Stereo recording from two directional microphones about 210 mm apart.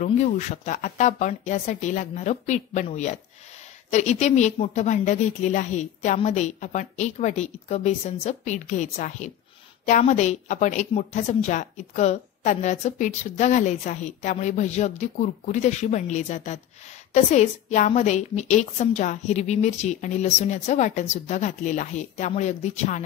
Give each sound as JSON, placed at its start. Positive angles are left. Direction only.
{"t": 0.0, "sound": "a woman's voice", "side_deg": 35}